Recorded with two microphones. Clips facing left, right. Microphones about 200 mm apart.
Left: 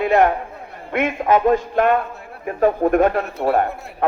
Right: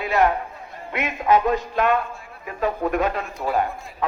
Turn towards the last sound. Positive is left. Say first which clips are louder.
# left 4 dB
turn(degrees=60)  # may be behind; listen again after turning